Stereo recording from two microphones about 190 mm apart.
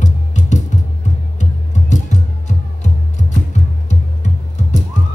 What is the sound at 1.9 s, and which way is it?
Music, 40° left (ahead or behind).